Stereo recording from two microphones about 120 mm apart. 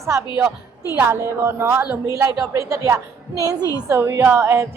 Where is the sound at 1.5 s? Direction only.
20° right (ahead or behind).